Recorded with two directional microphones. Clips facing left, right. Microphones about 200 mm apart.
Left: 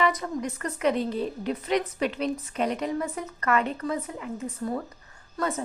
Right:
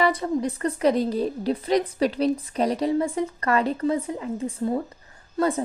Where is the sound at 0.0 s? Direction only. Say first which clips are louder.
Right 4 dB; 30° right (ahead or behind).